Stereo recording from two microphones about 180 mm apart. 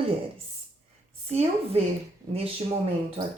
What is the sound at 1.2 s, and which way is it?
Speech, 35° right (ahead or behind).